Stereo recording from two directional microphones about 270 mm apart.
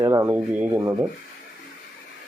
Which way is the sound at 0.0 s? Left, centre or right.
Centre.